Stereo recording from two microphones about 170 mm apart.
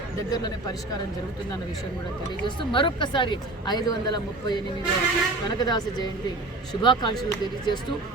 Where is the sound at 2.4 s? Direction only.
30° left (ahead or behind).